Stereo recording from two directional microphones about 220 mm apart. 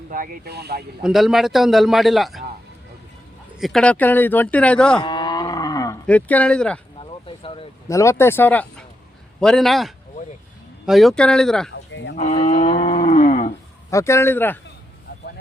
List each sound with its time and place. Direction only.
0.1 s speech: 40° right (ahead or behind)
1.0 s speech: centre (ahead or behind)
3.6 s speech: centre (ahead or behind)
5.0 s roaring cats: 20° left (ahead or behind)
7.0 s a sound: 25° left (ahead or behind)
7.9 s speech: 15° left (ahead or behind)
11.7 s a sound: 55° left (ahead or behind)
12.1 s cattle: 30° left (ahead or behind)
13.9 s speech: 10° left (ahead or behind)